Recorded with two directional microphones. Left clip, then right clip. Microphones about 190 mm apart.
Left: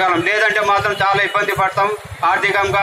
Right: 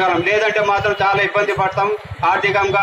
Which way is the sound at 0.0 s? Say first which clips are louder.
Left 1 dB; 30° right (ahead or behind).